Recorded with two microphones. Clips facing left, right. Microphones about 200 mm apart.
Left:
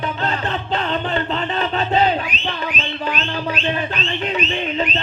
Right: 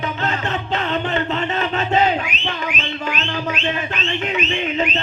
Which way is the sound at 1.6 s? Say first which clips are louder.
Left 1 dB; 35° left (ahead or behind).